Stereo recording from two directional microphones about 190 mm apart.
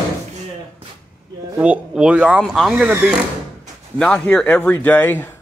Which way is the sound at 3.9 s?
5° left (ahead or behind).